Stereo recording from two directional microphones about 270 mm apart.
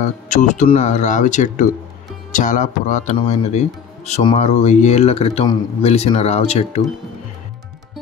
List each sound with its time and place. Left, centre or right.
0.3 s speech: left